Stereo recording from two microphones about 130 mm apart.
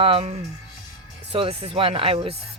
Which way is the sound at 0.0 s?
45° right (ahead or behind).